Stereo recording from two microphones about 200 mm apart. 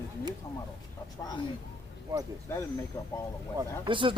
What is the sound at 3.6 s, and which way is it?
Speech, 25° right (ahead or behind).